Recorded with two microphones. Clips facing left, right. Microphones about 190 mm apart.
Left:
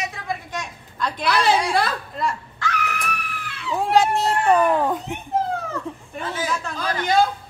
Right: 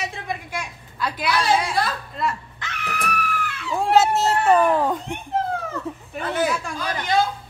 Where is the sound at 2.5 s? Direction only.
25° right (ahead or behind).